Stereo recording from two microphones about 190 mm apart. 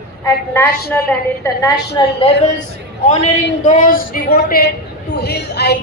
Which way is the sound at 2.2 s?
30° left (ahead or behind).